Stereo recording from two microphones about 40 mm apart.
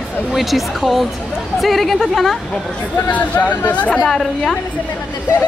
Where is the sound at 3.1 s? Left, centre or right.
Left.